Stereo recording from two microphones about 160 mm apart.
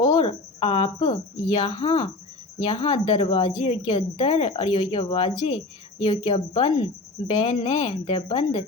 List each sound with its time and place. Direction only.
0.0 s cricket: 30° left (ahead or behind)
2.6 s speech: 35° left (ahead or behind)